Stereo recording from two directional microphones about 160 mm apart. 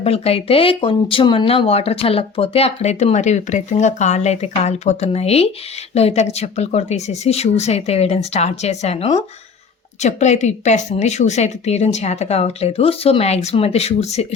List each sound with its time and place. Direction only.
0.0 s a woman's voice: 40° left (ahead or behind)